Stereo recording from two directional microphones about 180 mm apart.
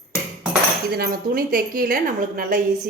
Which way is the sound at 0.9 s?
55° right (ahead or behind).